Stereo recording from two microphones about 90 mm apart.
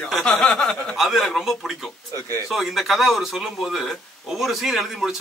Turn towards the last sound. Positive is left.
turn(degrees=-5)  # may be behind; listen again after turning